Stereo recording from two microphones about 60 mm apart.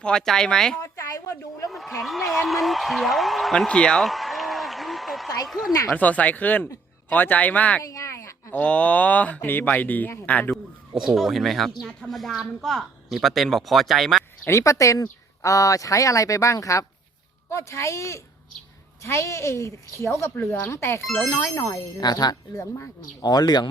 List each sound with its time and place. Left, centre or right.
0.0 s speech: centre
0.8 s a sound: left
2.0 s speech: centre
3.7 s speech: centre
4.0 s a sound: centre
5.5 s speech: centre
5.9 s speech: left
7.9 s a sound: left
8.5 s speech: left
11.1 s speech: centre
14.5 s speech: left
22.1 s speech: left